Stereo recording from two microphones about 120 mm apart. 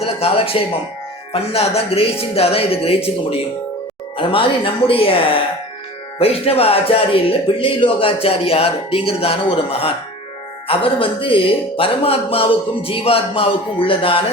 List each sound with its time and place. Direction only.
0.0 s speech: 55° left (ahead or behind)